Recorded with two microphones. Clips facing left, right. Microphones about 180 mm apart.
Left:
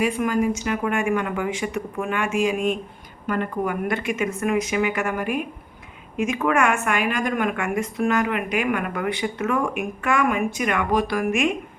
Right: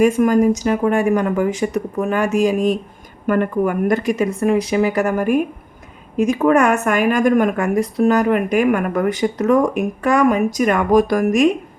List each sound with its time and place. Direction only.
0.0 s speech: 45° right (ahead or behind)
3.2 s speech: 50° right (ahead or behind)